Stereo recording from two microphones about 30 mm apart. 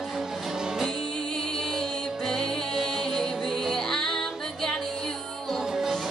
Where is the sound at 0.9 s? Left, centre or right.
Centre.